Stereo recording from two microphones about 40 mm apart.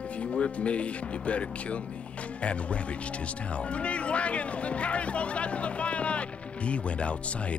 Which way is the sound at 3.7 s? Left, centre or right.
Left.